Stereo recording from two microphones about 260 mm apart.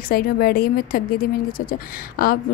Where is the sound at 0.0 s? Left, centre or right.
Left.